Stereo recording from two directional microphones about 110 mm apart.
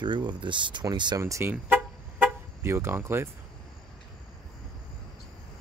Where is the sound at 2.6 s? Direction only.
25° right (ahead or behind).